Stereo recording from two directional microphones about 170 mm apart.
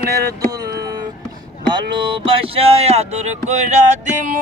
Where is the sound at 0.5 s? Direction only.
20° right (ahead or behind).